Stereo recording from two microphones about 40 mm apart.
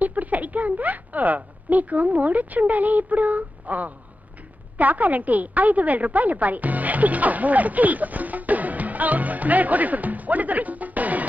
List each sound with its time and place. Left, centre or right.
0.0 s a woman's voice: right